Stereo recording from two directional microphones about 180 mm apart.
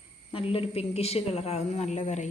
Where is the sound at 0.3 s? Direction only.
30° left (ahead or behind).